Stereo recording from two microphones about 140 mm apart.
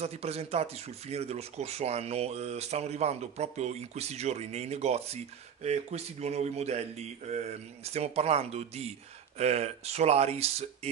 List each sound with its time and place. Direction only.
0.0 s speech: 50° right (ahead or behind)